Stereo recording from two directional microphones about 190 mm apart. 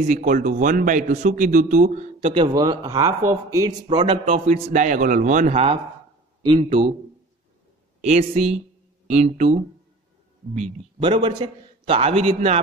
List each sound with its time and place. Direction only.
0.1 s a man's voice: 45° right (ahead or behind)
2.1 s a man's voice: 25° right (ahead or behind)
8.0 s a man's voice: 35° right (ahead or behind)
11.0 s a man's voice: 25° right (ahead or behind)